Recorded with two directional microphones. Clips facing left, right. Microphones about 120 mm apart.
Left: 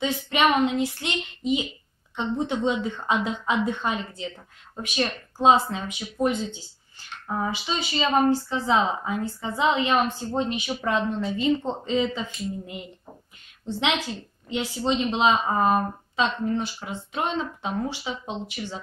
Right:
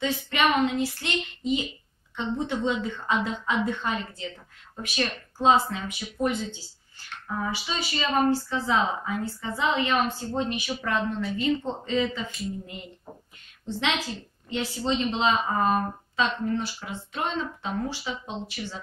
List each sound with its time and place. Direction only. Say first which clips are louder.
0.0 s a woman's voice: left 2 dB; 20° left (ahead or behind)
13.7 s a woman's voice: left 2 dB; 15° left (ahead or behind)